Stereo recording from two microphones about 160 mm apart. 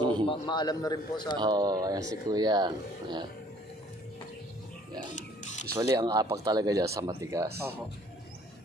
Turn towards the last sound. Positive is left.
turn(degrees=-20)  # may be behind; listen again after turning